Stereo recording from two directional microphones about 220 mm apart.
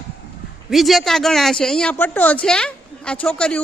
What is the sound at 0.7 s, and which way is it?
Speech, centre (ahead or behind).